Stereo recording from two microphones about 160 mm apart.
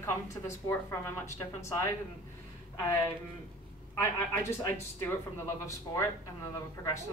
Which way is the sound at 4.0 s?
15° left (ahead or behind).